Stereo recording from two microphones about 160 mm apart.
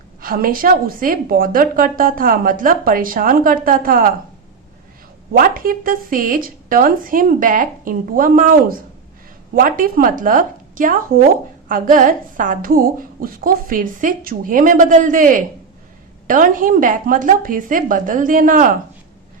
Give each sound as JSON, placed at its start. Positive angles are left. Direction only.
{"t": 0.2, "sound": "a woman's voice", "side_deg": -65}
{"t": 5.3, "sound": "a woman's voice", "side_deg": -60}